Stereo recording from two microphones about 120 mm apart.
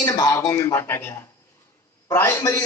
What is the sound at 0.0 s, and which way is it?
Speech, 30° left (ahead or behind).